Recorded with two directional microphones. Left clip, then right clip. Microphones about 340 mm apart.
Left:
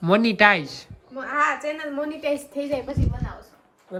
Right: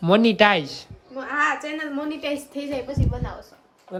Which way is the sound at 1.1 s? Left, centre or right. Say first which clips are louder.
Even; centre.